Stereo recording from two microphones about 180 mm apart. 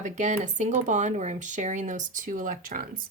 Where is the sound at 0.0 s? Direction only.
40° right (ahead or behind).